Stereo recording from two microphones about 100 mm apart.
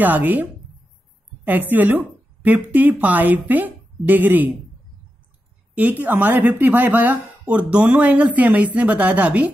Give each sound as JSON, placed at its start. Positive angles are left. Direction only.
{"t": 0.0, "sound": "a woman's voice", "side_deg": -20}
{"t": 5.8, "sound": "speech", "side_deg": -15}